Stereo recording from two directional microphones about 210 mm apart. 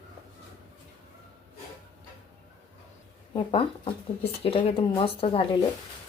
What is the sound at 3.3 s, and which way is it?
Speech, 25° left (ahead or behind).